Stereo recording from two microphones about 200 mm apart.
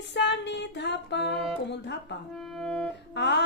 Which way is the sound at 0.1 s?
60° left (ahead or behind).